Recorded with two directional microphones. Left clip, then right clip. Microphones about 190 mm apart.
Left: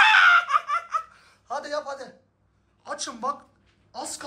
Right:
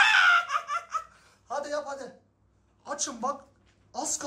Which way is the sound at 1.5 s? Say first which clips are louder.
Left 2 dB; 20° right (ahead or behind).